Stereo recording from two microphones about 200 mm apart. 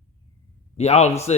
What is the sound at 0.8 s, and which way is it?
Speech, 35° left (ahead or behind).